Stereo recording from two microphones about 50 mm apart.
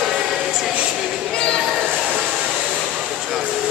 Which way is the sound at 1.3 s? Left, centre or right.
Centre.